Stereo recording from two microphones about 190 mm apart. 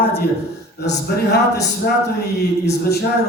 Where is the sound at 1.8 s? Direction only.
55° left (ahead or behind).